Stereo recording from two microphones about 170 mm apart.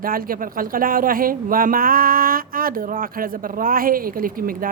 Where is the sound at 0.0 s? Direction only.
55° right (ahead or behind).